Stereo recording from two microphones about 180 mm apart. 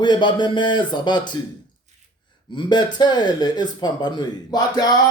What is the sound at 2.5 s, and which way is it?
Speech, 25° left (ahead or behind).